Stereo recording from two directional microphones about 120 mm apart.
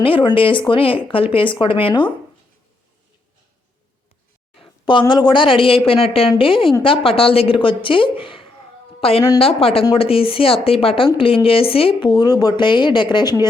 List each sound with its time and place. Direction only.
0.0 s speech: 45° left (ahead or behind)
4.9 s a woman's voice: 40° left (ahead or behind)